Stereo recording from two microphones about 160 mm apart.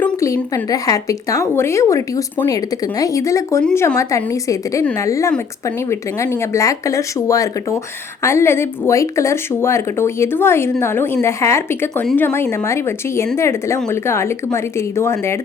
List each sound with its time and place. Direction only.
0.0 s speech: 15° left (ahead or behind)